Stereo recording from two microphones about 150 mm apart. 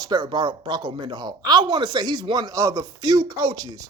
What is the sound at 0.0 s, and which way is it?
Speech, 30° right (ahead or behind).